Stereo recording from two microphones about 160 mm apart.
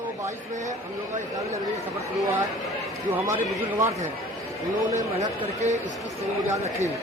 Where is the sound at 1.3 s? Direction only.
20° right (ahead or behind).